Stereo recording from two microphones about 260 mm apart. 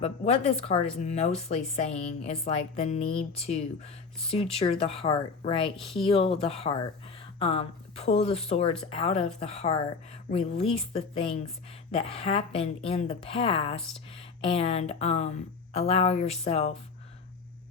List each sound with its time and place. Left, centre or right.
0.0 s speech: left